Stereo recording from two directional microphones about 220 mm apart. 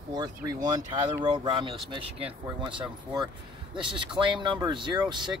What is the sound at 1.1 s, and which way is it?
Speech, 20° right (ahead or behind).